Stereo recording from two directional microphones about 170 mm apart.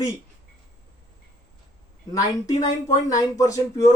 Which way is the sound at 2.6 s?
20° left (ahead or behind).